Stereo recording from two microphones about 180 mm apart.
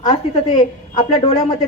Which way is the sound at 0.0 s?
35° left (ahead or behind).